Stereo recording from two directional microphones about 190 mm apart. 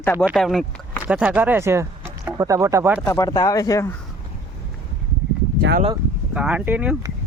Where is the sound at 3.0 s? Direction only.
15° left (ahead or behind).